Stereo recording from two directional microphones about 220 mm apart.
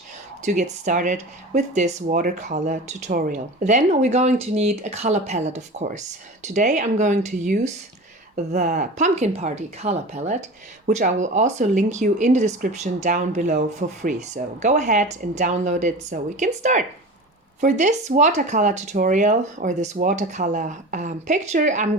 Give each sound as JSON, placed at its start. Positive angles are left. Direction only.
{"t": 0.4, "sound": "speech", "side_deg": -35}